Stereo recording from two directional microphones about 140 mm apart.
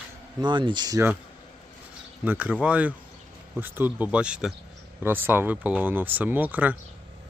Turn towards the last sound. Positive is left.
turn(degrees=-10)  # may be behind; listen again after turning